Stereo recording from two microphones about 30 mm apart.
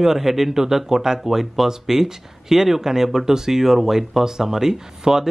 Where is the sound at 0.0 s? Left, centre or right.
Centre.